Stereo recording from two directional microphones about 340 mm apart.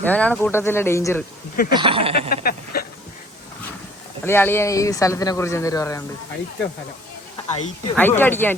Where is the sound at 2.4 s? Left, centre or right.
Left.